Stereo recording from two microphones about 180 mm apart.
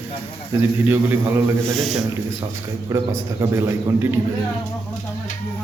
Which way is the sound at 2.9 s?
15° right (ahead or behind).